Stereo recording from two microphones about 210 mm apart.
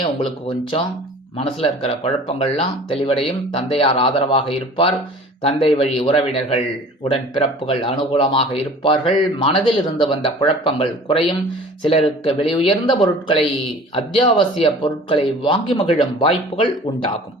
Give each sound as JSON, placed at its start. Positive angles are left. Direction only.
{"t": 0.0, "sound": "speech", "side_deg": 25}